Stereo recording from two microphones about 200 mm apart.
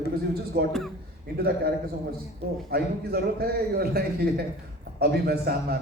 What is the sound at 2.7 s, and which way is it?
A man's voice, 50° right (ahead or behind).